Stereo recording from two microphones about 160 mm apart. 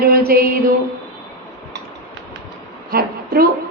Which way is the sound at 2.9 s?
70° right (ahead or behind).